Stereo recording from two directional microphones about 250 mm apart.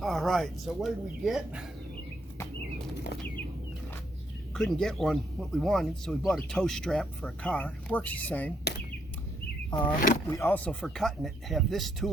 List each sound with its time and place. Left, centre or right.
0.0 s a man's voice: centre
4.5 s a man's voice: centre
9.6 s a man's voice: centre